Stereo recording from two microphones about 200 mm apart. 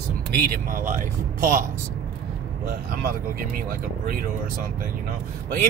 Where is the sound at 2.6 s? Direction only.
45° right (ahead or behind).